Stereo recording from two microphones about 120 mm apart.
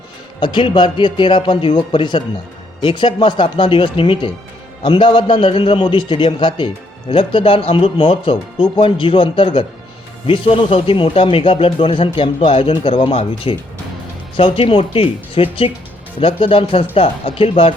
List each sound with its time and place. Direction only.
0.3 s speech: 40° left (ahead or behind)